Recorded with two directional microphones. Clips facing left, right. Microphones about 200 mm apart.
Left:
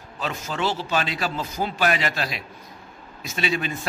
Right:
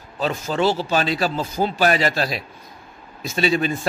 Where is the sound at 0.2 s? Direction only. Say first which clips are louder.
Right 6 dB; 35° right (ahead or behind).